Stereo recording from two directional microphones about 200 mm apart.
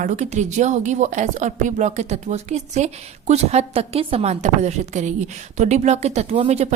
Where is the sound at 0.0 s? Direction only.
35° right (ahead or behind).